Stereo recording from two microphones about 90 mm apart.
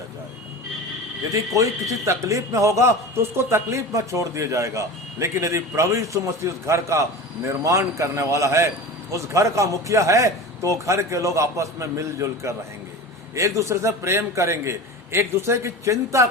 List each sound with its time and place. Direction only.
1.3 s a man's voice: 35° right (ahead or behind)